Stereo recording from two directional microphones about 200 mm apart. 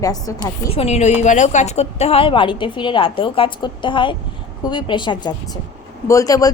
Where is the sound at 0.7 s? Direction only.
30° left (ahead or behind).